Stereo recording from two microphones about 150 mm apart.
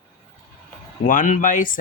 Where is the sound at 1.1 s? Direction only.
60° left (ahead or behind).